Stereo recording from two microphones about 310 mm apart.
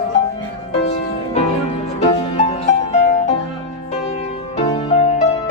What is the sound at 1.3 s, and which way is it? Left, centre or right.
Music, left.